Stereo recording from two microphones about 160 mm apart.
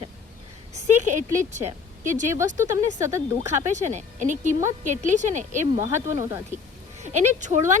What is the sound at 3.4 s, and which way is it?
Speech, 50° right (ahead or behind).